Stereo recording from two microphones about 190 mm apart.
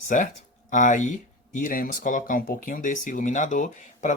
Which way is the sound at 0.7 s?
40° left (ahead or behind).